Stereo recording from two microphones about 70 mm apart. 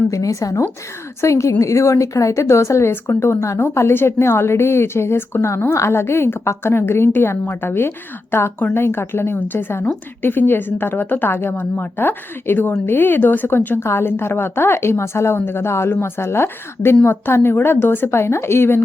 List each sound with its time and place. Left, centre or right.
0.1 s a woman's voice: left